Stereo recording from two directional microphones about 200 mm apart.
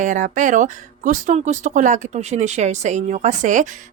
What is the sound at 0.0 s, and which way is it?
Speech, 40° right (ahead or behind).